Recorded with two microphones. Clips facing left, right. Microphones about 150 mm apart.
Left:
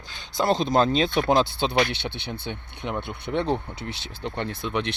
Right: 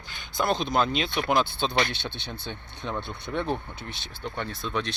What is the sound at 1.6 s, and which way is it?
Speech, 20° left (ahead or behind).